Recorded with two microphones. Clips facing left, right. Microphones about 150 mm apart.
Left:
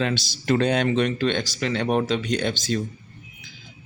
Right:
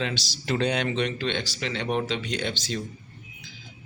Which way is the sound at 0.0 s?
50° left (ahead or behind).